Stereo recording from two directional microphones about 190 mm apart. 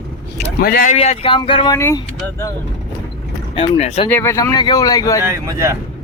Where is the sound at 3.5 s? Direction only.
35° left (ahead or behind).